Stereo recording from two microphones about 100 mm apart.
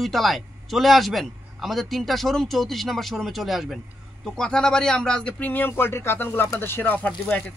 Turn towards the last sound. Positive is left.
turn(degrees=15)  # may be behind; listen again after turning